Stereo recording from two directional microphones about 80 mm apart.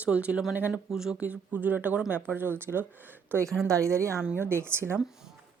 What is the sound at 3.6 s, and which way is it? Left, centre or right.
A woman's voice, right.